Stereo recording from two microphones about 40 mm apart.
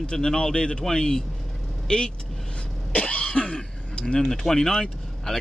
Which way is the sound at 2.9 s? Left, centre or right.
Left.